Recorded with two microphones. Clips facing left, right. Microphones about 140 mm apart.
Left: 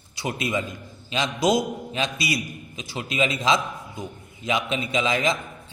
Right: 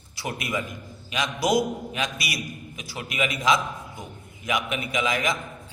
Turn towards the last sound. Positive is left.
turn(degrees=25)  # may be behind; listen again after turning